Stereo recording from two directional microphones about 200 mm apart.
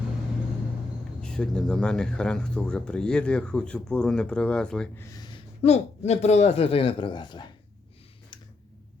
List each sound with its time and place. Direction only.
1.2 s speech: 5° left (ahead or behind)
5.6 s speech: 35° left (ahead or behind)